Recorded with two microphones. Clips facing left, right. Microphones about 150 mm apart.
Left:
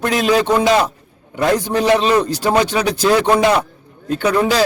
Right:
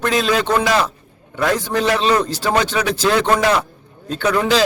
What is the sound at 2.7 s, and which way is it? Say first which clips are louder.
Speech: left 2 dB; 35° left (ahead or behind).